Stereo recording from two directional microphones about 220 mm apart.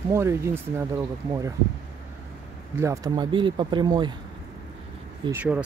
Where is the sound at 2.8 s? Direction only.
15° right (ahead or behind).